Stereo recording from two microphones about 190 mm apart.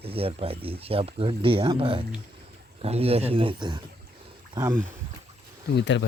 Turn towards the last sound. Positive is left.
turn(degrees=70)  # may be behind; listen again after turning